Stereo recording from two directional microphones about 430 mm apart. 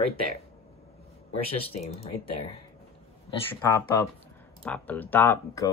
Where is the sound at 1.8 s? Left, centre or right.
Centre.